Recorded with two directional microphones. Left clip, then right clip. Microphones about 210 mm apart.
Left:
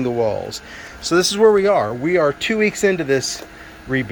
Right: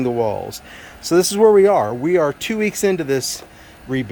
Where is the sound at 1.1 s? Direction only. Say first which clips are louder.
Right 1 dB; 25° right (ahead or behind).